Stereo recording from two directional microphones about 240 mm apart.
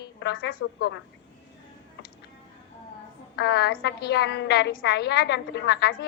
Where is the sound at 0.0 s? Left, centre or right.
Left.